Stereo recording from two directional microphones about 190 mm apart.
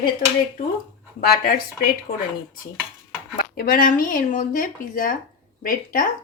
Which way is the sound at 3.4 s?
50° left (ahead or behind).